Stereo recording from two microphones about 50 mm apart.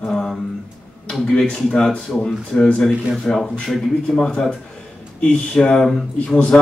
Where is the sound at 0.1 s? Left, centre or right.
Centre.